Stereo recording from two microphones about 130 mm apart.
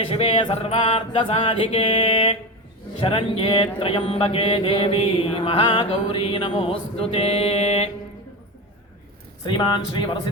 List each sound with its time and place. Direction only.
0.1 s mantra: 45° left (ahead or behind)
9.4 s speech: 35° left (ahead or behind)